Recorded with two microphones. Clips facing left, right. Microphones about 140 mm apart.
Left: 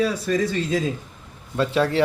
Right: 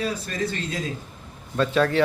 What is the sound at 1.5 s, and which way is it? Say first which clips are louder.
Speech: even; 25° left (ahead or behind).